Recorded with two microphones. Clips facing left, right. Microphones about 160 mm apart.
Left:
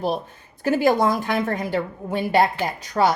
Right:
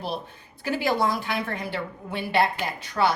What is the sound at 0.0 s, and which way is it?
Speech, 45° left (ahead or behind).